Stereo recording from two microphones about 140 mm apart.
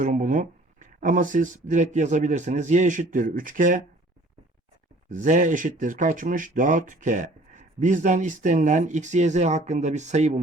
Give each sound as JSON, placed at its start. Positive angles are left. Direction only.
{"t": 0.0, "sound": "speech", "side_deg": -65}
{"t": 5.0, "sound": "speech", "side_deg": -65}